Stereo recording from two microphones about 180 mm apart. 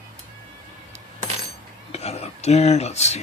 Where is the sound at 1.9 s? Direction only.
35° left (ahead or behind).